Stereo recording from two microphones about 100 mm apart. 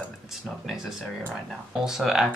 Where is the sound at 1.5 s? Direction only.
5° right (ahead or behind).